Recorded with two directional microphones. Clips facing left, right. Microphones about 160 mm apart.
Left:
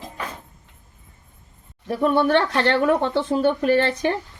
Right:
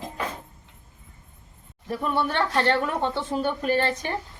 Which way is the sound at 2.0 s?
65° left (ahead or behind).